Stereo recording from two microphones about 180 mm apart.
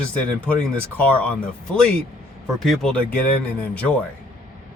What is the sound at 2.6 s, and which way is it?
Speech, centre (ahead or behind).